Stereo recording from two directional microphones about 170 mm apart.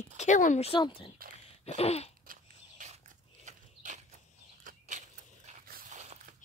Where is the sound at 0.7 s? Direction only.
30° left (ahead or behind).